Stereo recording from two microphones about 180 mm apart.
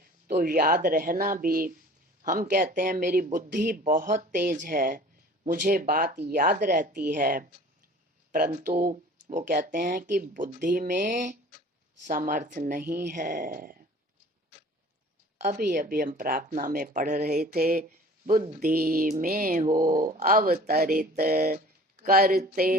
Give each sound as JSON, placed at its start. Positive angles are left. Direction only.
{"t": 0.0, "sound": "speech", "side_deg": -50}
{"t": 15.4, "sound": "speech", "side_deg": -50}
{"t": 17.4, "sound": "mantra", "side_deg": -55}
{"t": 18.4, "sound": "speech", "side_deg": -50}